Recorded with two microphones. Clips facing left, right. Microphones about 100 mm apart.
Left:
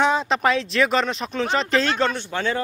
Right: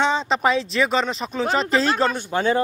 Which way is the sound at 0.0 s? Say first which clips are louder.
Left 1 dB; 5° left (ahead or behind).